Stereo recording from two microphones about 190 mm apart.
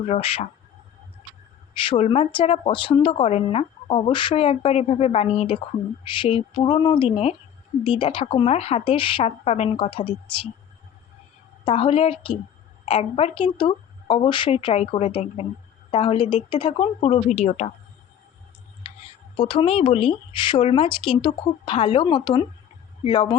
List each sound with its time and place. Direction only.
0.0 s a woman's voice: 30° left (ahead or behind)
1.9 s speech: 30° left (ahead or behind)
11.6 s a woman's voice: 30° left (ahead or behind)
19.4 s speech: 25° left (ahead or behind)